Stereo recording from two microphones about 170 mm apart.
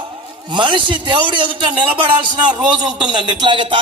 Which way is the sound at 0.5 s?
30° right (ahead or behind).